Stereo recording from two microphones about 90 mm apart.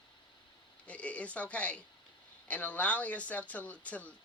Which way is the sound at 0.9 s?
15° left (ahead or behind).